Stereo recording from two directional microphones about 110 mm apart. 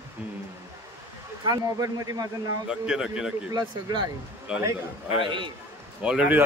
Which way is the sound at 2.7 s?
5° right (ahead or behind).